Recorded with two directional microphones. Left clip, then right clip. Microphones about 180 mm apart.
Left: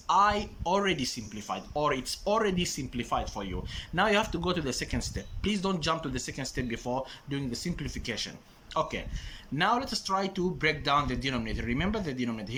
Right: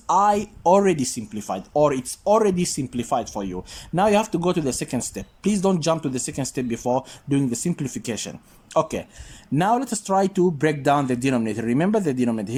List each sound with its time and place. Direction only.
0.1 s speech: 35° right (ahead or behind)